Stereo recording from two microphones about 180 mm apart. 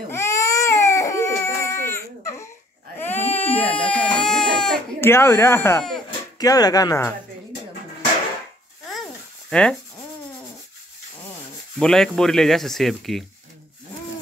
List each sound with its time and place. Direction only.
0.1 s baby cry: 15° left (ahead or behind)
5.1 s speech: 15° left (ahead or behind)
9.5 s sanding: 5° left (ahead or behind)
11.8 s speech: 5° left (ahead or behind)